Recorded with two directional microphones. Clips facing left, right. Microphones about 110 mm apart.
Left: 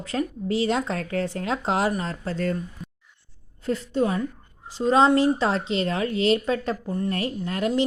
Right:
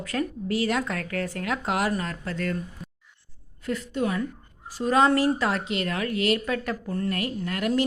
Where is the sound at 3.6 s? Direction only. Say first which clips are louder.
Left 3 dB; 30° left (ahead or behind).